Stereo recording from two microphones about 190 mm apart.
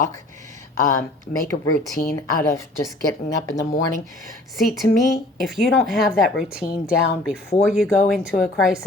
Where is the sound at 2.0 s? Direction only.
50° left (ahead or behind).